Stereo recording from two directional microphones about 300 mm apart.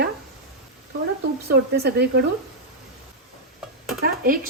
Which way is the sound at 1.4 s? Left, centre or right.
Right.